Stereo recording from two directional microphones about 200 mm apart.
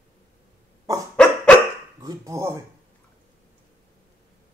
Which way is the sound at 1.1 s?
5° left (ahead or behind).